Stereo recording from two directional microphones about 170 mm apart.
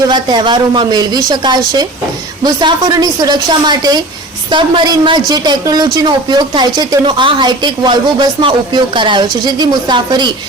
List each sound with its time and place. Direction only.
0.1 s a woman's voice: 25° right (ahead or behind)